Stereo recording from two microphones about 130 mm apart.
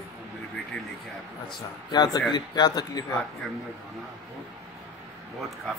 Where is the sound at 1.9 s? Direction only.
35° left (ahead or behind).